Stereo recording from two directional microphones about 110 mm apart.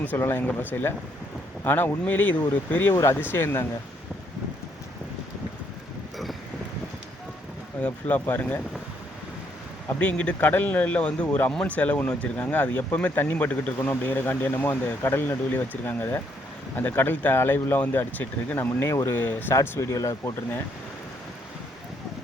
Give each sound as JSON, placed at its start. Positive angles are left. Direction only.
{"t": 0.0, "sound": "a man's voice", "side_deg": 20}
{"t": 7.8, "sound": "a man's voice", "side_deg": 15}
{"t": 10.0, "sound": "a man's voice", "side_deg": 10}
{"t": 19.5, "sound": "speech", "side_deg": 30}